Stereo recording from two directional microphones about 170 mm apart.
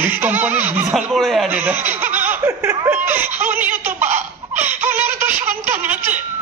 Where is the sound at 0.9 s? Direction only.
Centre (ahead or behind).